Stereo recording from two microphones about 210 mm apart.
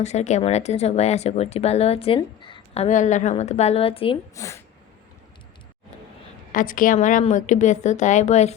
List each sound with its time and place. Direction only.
0.0 s speech: 30° left (ahead or behind)
4.4 s speech: 15° left (ahead or behind)
6.5 s speech: 40° left (ahead or behind)